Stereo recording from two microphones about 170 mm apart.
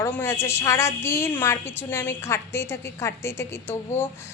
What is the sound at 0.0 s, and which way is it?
A woman's voice, 15° left (ahead or behind).